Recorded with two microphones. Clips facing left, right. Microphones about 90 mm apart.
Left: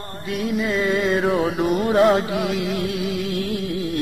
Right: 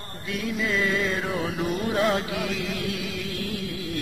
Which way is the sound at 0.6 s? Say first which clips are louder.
Left 3 dB; 25° left (ahead or behind).